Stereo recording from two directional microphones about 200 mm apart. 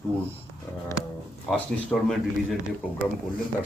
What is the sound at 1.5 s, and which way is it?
Speech, centre (ahead or behind).